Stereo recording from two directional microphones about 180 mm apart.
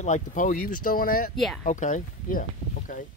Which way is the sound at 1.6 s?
45° left (ahead or behind).